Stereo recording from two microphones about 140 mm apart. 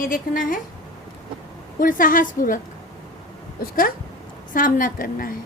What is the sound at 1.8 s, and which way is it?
Speech, 80° left.